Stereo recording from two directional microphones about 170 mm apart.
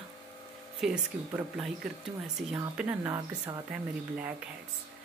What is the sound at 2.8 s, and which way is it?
Speech, 10° right (ahead or behind).